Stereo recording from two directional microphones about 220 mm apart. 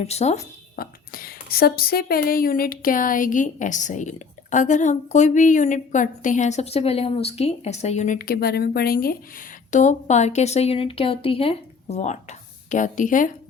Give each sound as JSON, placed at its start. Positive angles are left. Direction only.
{"t": 0.0, "sound": "a woman's voice", "side_deg": 30}
{"t": 9.7, "sound": "a woman's voice", "side_deg": 30}